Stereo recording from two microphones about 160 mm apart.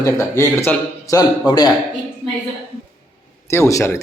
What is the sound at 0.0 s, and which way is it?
A man's voice, 20° left (ahead or behind).